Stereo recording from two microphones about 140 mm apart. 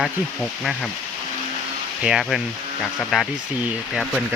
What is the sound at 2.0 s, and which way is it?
Speech, 5° right (ahead or behind).